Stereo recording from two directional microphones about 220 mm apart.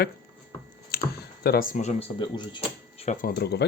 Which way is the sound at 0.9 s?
45° left (ahead or behind).